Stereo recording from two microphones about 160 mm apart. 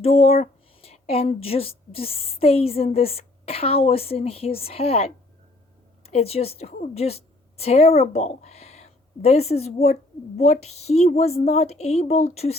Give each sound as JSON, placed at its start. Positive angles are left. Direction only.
{"t": 0.0, "sound": "a woman's voice", "side_deg": 40}